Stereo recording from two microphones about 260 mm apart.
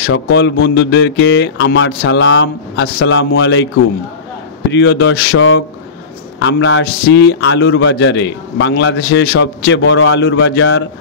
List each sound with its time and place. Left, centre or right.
0.0 s a man's voice: left
4.6 s a man's voice: left